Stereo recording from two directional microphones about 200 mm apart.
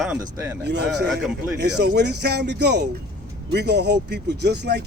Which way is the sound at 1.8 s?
55° right (ahead or behind).